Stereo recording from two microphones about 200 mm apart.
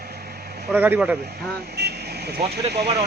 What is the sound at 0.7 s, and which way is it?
Speech, 10° right (ahead or behind).